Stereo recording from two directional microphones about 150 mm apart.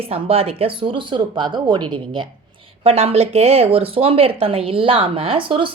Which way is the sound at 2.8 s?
45° right (ahead or behind).